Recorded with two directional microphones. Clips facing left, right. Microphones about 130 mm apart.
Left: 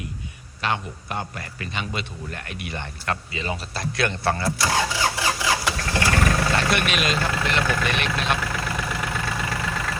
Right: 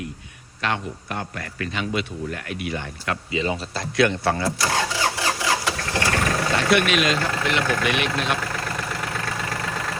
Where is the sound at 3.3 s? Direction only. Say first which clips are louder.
Right 5 dB; 25° right (ahead or behind).